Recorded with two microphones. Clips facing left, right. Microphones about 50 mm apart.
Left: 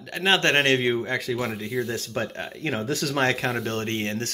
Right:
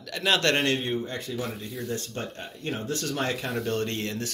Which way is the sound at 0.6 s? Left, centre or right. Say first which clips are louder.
Left 5 dB; left.